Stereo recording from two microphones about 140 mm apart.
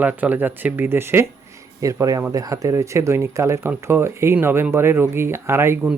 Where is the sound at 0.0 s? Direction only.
10° right (ahead or behind).